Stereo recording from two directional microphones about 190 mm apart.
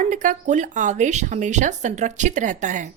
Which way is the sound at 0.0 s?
40° right (ahead or behind).